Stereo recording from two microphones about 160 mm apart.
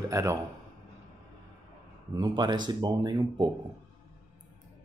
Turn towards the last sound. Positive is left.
turn(degrees=-25)  # may be behind; listen again after turning